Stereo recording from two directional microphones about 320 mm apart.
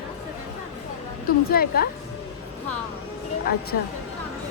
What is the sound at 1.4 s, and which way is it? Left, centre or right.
Speech, left.